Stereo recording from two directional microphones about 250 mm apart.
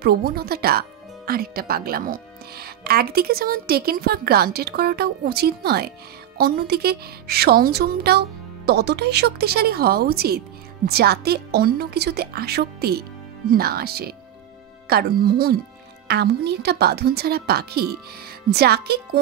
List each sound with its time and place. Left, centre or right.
0.0 s speech: right